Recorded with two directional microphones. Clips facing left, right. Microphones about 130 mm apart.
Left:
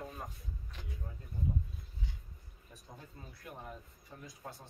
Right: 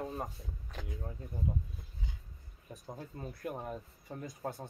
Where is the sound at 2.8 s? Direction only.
45° right (ahead or behind).